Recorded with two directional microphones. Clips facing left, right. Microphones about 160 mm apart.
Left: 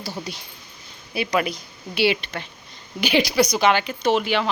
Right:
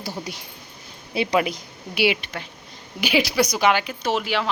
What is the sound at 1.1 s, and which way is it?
A woman's voice, 25° right (ahead or behind).